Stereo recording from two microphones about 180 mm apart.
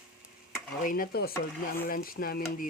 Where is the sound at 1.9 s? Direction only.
55° left (ahead or behind).